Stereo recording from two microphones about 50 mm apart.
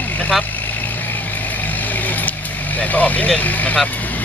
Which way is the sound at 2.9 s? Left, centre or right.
Left.